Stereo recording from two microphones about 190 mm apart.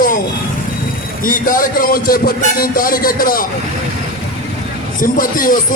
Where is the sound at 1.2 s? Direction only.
45° left (ahead or behind).